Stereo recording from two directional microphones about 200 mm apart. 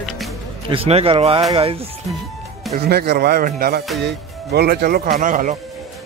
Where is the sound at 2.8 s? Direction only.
55° right (ahead or behind).